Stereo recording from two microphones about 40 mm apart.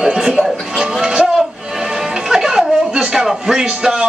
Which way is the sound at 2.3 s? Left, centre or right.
Centre.